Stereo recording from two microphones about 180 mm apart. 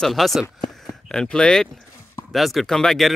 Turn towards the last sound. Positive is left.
turn(degrees=0)  # may be behind; listen again after turning